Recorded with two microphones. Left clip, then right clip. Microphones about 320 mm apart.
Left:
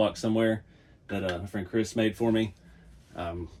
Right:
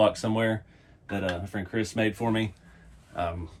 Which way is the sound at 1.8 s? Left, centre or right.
Right.